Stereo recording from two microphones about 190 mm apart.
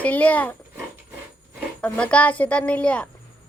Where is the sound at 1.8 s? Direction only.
5° left (ahead or behind).